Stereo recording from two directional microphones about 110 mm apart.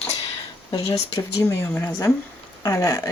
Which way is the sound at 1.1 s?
30° left (ahead or behind).